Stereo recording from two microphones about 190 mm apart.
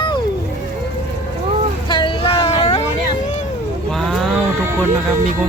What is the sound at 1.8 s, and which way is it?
Vehicle, 25° left (ahead or behind).